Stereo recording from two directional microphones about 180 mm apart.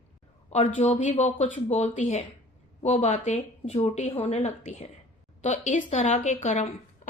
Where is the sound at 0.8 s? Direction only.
40° left (ahead or behind).